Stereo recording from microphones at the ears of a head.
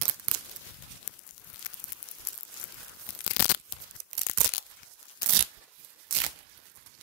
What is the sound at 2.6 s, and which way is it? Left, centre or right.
Tearing, left.